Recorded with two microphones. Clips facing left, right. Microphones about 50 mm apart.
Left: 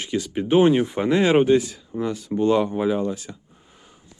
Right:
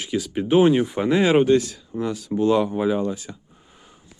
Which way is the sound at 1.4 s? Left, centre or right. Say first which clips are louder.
Even; centre.